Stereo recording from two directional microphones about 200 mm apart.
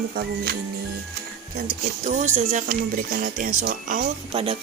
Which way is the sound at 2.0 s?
40° right (ahead or behind).